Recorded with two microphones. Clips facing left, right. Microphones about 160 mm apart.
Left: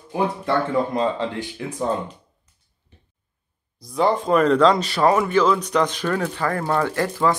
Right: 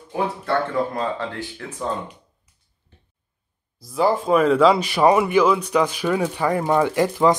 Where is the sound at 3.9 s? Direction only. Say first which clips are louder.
Even; 5° right (ahead or behind).